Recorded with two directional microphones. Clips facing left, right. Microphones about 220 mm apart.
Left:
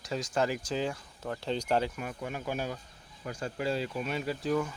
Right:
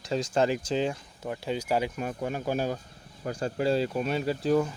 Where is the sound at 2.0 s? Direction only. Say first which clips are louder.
Right 6 dB; 35° right (ahead or behind).